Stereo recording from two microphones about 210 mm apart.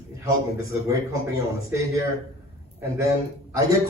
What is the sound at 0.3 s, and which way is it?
A man's voice, 15° right (ahead or behind).